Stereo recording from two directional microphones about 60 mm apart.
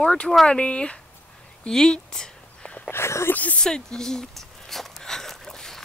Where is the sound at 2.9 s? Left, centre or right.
Left.